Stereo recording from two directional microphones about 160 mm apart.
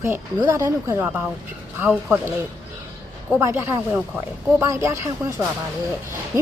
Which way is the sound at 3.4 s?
15° right (ahead or behind).